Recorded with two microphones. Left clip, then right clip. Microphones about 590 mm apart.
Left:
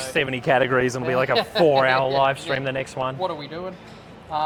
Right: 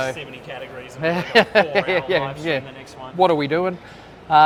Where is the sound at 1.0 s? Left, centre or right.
Right.